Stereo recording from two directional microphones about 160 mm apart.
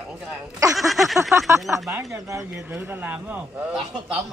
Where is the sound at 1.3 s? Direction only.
20° right (ahead or behind).